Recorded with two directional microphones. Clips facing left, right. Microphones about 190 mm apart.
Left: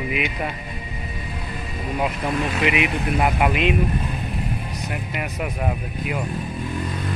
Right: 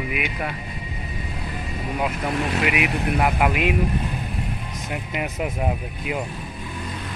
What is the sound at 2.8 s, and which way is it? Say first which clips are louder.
Speech: left 1 dB; 5° right (ahead or behind).